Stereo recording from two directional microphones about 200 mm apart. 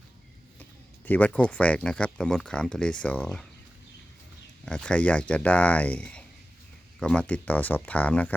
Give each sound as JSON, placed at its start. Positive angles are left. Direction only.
{"t": 1.0, "sound": "speech", "side_deg": 10}
{"t": 4.6, "sound": "speech", "side_deg": 5}